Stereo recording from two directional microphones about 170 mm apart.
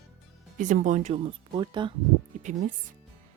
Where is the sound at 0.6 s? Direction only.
50° right (ahead or behind); by 1.9 s 25° right (ahead or behind).